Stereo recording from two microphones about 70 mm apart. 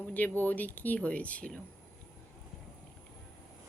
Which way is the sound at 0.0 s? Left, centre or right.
Left.